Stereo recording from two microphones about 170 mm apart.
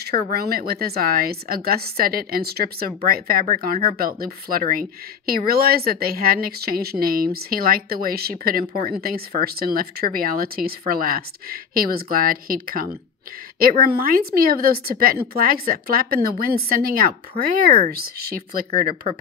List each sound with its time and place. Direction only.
0.0 s speech: 65° right (ahead or behind)